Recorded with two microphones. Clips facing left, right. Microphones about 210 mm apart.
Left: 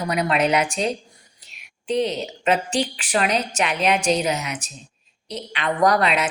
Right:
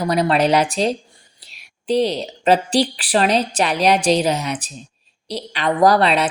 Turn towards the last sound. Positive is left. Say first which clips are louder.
# right 4 dB
turn(degrees=-30)  # may be behind; listen again after turning